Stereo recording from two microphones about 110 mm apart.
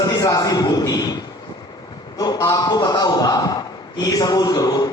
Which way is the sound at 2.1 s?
35° left (ahead or behind).